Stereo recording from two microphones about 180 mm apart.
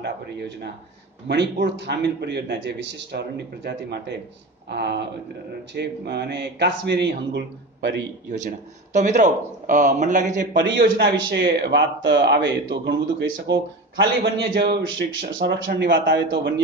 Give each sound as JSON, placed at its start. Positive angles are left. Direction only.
{"t": 1.2, "sound": "a man's voice", "side_deg": -70}
{"t": 8.3, "sound": "speech", "side_deg": -45}
{"t": 10.5, "sound": "a man's voice", "side_deg": -80}